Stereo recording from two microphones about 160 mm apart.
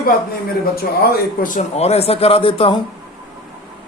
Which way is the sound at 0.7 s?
70° left (ahead or behind).